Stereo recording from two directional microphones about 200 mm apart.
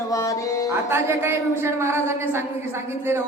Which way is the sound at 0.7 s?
10° right (ahead or behind).